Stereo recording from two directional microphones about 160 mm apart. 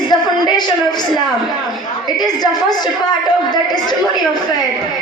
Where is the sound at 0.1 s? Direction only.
25° left (ahead or behind).